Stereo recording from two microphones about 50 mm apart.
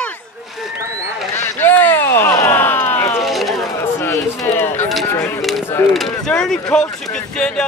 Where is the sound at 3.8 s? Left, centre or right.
Left.